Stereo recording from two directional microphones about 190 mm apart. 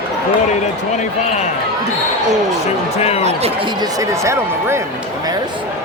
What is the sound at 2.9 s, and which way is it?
Speech, 35° left (ahead or behind).